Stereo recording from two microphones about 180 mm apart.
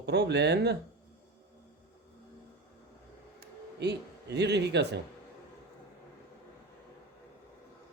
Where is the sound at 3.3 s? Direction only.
70° right (ahead or behind).